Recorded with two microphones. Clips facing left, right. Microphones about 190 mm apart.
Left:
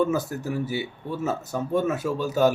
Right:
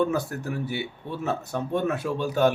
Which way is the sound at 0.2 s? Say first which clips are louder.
Left 1 dB; 60° right (ahead or behind).